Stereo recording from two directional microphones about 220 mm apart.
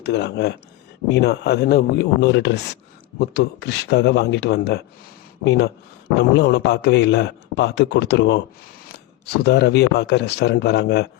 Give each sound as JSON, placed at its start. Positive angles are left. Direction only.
{"t": 0.0, "sound": "a man's voice", "side_deg": 50}